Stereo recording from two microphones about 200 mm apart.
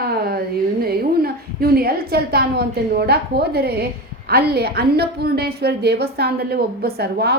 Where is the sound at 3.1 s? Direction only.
55° right (ahead or behind).